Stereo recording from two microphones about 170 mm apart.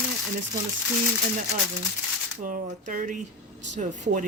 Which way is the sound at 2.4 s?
50° right (ahead or behind).